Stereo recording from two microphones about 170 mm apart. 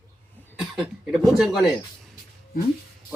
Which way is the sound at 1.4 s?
Centre (ahead or behind).